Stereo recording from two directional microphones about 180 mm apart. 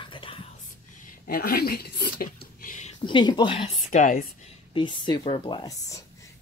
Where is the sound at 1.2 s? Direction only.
55° left (ahead or behind).